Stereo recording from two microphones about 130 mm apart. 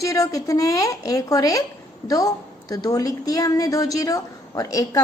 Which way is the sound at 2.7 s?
30° left (ahead or behind).